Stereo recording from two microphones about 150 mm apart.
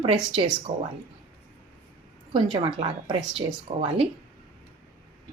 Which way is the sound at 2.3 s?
35° right (ahead or behind).